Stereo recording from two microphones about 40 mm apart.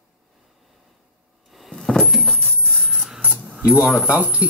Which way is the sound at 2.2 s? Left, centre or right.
Left.